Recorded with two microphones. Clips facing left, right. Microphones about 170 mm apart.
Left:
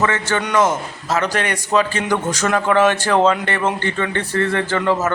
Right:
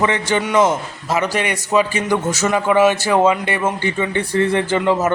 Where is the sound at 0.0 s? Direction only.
15° right (ahead or behind).